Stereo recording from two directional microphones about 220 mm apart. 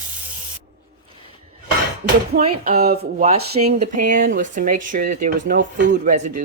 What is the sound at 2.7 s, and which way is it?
Speech, 45° right (ahead or behind).